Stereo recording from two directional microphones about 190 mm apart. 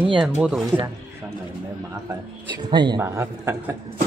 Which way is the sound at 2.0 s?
25° right (ahead or behind).